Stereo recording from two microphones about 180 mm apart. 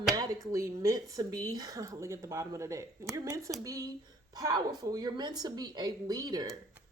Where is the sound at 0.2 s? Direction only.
15° right (ahead or behind).